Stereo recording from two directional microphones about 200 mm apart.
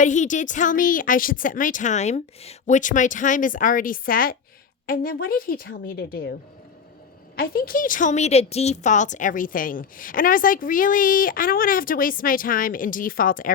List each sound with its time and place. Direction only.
0.0 s a woman's voice: 40° left (ahead or behind)
7.3 s a woman's voice: 50° left (ahead or behind)